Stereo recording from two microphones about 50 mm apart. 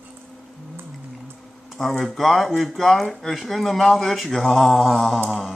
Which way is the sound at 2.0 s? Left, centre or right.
Centre.